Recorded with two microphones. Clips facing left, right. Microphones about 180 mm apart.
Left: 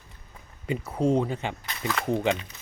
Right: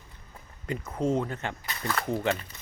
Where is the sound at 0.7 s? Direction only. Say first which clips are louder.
Left 4 dB; 15° left (ahead or behind).